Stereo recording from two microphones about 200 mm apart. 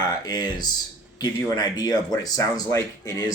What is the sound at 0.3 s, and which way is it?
Speech, 20° left (ahead or behind).